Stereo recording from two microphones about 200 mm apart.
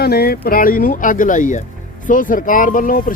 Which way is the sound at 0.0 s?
50° left (ahead or behind).